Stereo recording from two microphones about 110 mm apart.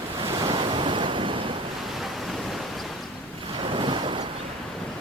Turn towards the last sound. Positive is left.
turn(degrees=-50)  # may be behind; listen again after turning